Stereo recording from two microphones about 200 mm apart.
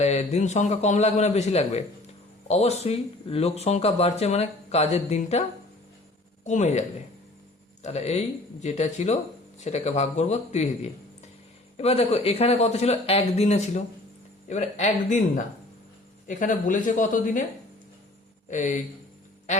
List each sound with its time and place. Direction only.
0.0 s speech: 35° left (ahead or behind)
6.4 s speech: 35° left (ahead or behind)
11.8 s speech: 30° left (ahead or behind)
16.2 s speech: 40° left (ahead or behind)
18.4 s speech: 35° left (ahead or behind)
19.5 s music: 35° left (ahead or behind)